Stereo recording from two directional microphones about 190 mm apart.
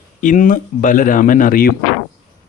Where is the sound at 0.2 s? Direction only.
45° left (ahead or behind).